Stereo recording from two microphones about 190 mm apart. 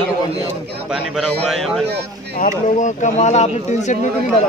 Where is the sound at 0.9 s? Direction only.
5° right (ahead or behind).